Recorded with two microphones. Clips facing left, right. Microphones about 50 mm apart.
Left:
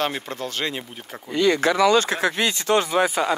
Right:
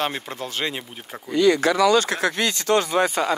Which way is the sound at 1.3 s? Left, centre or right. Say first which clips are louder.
Right 1 dB; left.